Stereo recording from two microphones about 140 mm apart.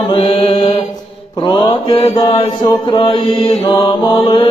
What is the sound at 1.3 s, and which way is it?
Mantra, 30° left (ahead or behind).